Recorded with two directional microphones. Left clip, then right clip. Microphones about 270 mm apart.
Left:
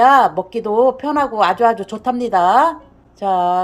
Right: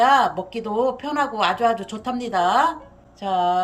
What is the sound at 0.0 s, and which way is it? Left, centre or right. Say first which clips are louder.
A woman's voice: left 6 dB; centre.